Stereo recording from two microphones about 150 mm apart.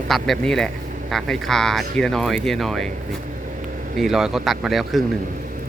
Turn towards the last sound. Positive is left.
turn(degrees=0)  # may be behind; listen again after turning